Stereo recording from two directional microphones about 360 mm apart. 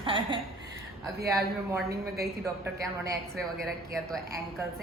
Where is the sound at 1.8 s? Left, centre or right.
Right.